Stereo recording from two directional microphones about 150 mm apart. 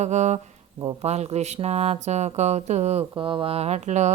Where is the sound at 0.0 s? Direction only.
50° right (ahead or behind).